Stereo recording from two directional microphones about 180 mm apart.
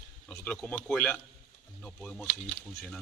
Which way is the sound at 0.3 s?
10° left (ahead or behind).